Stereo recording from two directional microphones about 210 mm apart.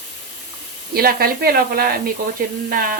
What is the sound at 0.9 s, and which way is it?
A woman's voice, 45° right (ahead or behind).